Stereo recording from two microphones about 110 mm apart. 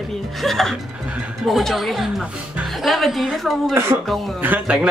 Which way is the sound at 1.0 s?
10° right (ahead or behind).